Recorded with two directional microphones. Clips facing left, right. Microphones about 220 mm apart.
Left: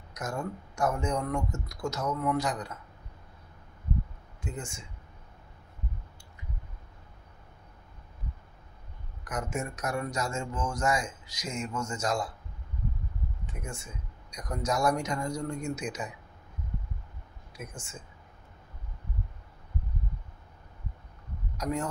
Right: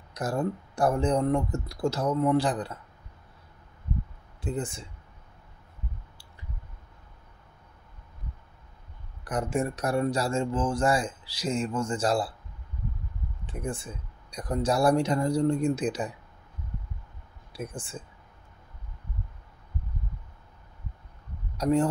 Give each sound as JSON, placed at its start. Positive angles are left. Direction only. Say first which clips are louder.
{"t": 0.1, "sound": "speech", "louder": "right 6 dB", "side_deg": -35}
{"t": 4.4, "sound": "speech", "louder": "right 7 dB", "side_deg": -35}
{"t": 9.2, "sound": "speech", "louder": "right 6 dB", "side_deg": -35}
{"t": 13.5, "sound": "speech", "louder": "right 10 dB", "side_deg": -30}
{"t": 17.5, "sound": "speech", "louder": "right 7 dB", "side_deg": -35}
{"t": 21.5, "sound": "speech", "louder": "right 8 dB", "side_deg": -30}